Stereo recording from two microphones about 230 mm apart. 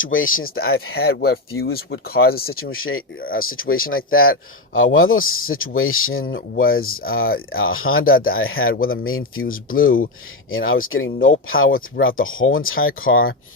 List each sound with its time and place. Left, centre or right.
0.0 s speech: left
1.6 s speech: left
2.6 s speech: left
3.2 s speech: left
3.4 s speech: left
6.5 s speech: left
6.8 s speech: left
9.5 s speech: left
10.5 s speech: left